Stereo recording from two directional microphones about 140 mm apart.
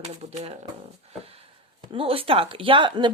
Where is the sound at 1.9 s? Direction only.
40° right (ahead or behind).